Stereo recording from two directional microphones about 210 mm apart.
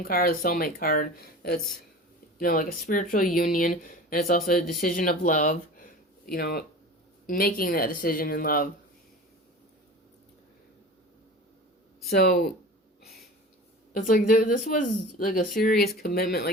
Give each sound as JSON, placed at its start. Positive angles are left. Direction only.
{"t": 0.0, "sound": "speech", "side_deg": 45}
{"t": 12.1, "sound": "speech", "side_deg": 50}
{"t": 13.9, "sound": "speech", "side_deg": 40}